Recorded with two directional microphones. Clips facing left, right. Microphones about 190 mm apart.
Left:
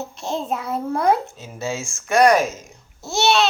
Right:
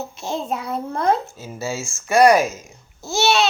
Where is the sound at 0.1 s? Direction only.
Centre (ahead or behind).